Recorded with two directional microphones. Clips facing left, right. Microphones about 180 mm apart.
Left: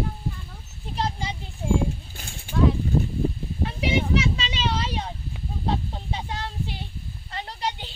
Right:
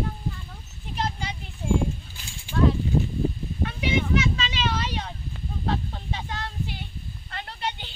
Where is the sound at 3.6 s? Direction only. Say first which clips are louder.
Left 1 dB; 30° left (ahead or behind).